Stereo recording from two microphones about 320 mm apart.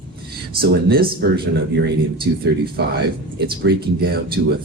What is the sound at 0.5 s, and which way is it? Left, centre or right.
Speech, right.